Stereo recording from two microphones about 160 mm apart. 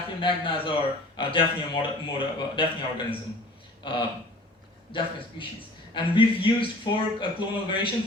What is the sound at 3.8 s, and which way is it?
Speech, 30° left (ahead or behind).